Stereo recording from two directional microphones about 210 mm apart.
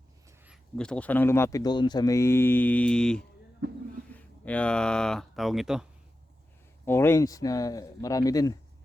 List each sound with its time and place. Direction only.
0.3 s a sound: 5° right (ahead or behind)
0.8 s speech: 5° left (ahead or behind)
6.8 s speech: 10° left (ahead or behind)